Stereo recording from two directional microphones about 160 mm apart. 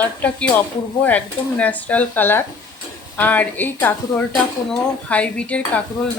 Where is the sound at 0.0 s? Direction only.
10° left (ahead or behind).